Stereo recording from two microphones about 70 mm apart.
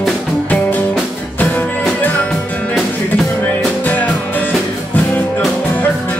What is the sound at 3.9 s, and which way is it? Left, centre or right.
Music, left.